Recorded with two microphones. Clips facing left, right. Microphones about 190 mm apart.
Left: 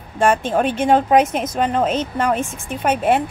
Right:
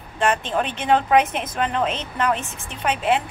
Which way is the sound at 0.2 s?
50° left (ahead or behind).